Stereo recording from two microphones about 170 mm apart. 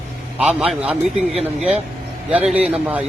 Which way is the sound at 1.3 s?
35° right (ahead or behind).